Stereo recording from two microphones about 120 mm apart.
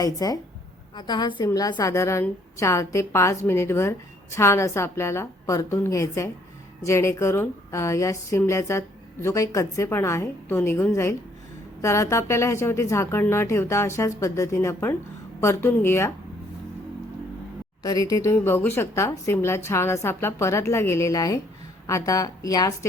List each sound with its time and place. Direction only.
0.0 s a woman's voice: 30° left (ahead or behind)
17.8 s a woman's voice: 30° left (ahead or behind)